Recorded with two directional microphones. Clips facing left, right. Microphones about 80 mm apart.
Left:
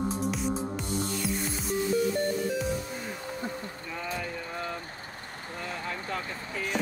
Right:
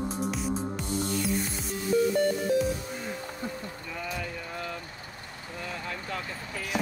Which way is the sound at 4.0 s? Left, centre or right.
Left.